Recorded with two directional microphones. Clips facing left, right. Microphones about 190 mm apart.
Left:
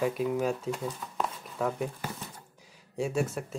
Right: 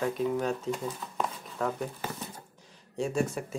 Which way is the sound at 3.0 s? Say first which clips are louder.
Even; 5° left (ahead or behind).